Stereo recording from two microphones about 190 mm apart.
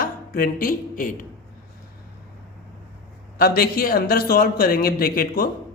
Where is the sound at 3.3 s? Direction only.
50° left (ahead or behind).